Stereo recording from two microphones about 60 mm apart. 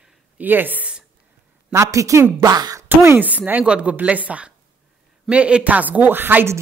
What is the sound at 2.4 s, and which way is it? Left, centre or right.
Speech, right.